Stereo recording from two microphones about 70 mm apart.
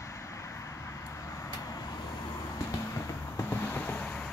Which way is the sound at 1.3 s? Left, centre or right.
Left.